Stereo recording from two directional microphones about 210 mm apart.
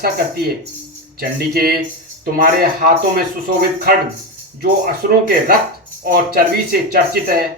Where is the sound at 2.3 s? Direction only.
45° right (ahead or behind).